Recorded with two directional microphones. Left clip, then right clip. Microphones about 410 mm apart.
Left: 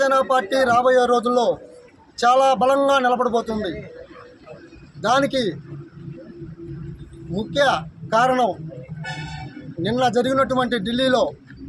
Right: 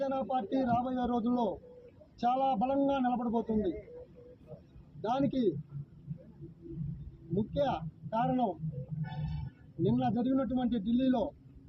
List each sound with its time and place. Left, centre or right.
0.0 s a man's voice: centre
5.0 s a man's voice: centre
7.6 s a man's voice: centre
9.8 s a man's voice: left